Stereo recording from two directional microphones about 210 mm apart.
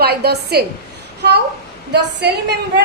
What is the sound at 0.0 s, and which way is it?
Speech, 50° right (ahead or behind).